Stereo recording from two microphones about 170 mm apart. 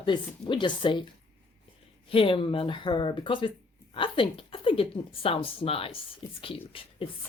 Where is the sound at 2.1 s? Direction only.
30° left (ahead or behind).